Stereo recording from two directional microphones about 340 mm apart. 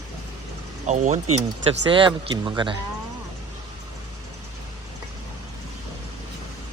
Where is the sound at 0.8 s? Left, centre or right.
Right.